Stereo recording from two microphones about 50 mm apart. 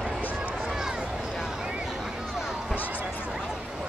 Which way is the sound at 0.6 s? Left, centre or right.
Centre.